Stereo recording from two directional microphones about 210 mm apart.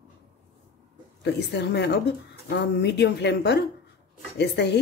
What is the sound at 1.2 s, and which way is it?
A woman's voice, 55° left (ahead or behind).